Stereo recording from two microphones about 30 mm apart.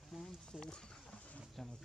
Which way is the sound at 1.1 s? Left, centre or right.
Left.